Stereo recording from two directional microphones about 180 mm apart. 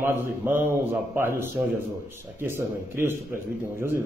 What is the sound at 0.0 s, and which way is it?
Speech, 15° right (ahead or behind).